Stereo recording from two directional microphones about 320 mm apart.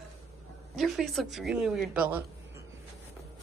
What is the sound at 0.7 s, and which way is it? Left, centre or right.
Speech, centre.